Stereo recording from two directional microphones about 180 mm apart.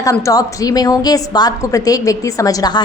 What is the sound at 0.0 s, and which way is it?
A woman's voice, 20° left (ahead or behind).